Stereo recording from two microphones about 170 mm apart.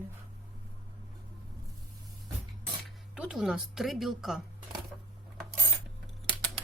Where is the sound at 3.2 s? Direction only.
5° right (ahead or behind).